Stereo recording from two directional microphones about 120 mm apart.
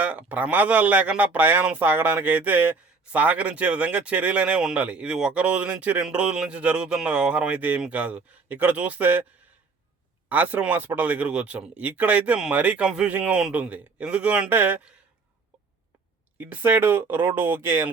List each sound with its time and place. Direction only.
0.0 s speech: 10° right (ahead or behind)
10.2 s speech: 15° right (ahead or behind)
16.4 s speech: 15° right (ahead or behind)